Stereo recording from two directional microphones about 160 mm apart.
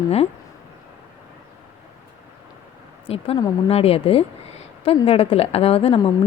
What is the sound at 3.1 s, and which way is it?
A woman's voice, 35° left (ahead or behind).